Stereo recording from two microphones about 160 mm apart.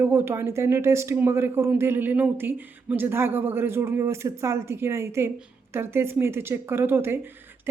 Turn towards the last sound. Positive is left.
turn(degrees=-15)  # may be behind; listen again after turning